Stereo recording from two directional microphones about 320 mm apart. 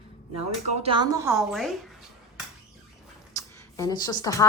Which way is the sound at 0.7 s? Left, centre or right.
Centre.